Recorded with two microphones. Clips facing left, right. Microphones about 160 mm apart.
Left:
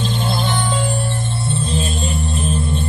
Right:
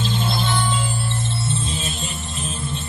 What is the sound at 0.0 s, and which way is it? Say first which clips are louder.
Music: left 2 dB; 40° left (ahead or behind).